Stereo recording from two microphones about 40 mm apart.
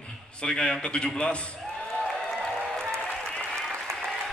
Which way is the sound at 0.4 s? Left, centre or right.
Left.